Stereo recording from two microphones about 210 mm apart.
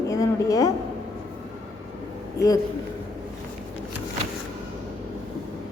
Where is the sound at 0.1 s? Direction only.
15° left (ahead or behind).